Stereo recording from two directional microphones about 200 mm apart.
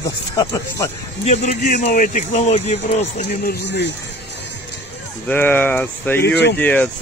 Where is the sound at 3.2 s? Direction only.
55° left (ahead or behind).